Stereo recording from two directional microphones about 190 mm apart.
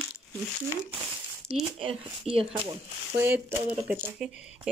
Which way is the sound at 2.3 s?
30° right (ahead or behind).